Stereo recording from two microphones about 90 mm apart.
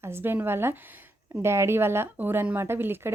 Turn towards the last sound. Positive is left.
turn(degrees=-25)  # may be behind; listen again after turning